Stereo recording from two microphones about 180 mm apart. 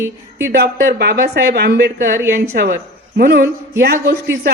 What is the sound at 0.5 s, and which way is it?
Speech, 60° right (ahead or behind).